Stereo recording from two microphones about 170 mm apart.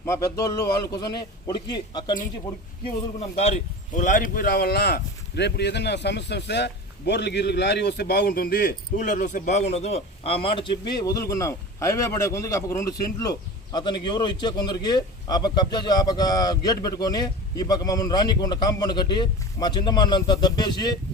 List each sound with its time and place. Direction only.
0.0 s a man's voice: 15° left (ahead or behind)
3.2 s a man's voice: 40° left (ahead or behind)